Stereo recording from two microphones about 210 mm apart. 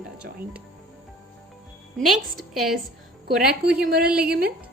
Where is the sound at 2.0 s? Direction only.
Centre (ahead or behind).